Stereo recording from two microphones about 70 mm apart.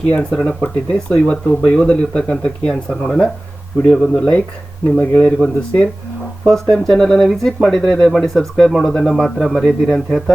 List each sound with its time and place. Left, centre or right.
0.1 s speech: centre
9.6 s speech: centre
10.1 s speech: centre